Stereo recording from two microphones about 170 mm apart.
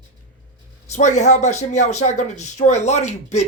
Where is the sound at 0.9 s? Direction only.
45° left (ahead or behind).